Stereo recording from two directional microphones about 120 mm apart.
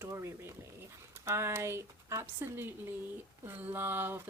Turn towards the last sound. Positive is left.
turn(degrees=-15)  # may be behind; listen again after turning